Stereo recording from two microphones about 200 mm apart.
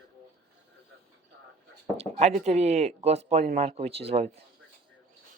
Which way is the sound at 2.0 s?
35° right (ahead or behind).